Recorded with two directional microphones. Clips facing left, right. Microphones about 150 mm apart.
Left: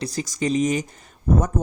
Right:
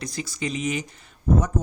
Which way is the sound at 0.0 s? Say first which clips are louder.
Left 5 dB; 40° left (ahead or behind).